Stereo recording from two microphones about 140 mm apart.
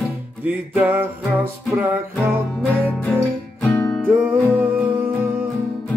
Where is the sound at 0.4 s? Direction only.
10° right (ahead or behind).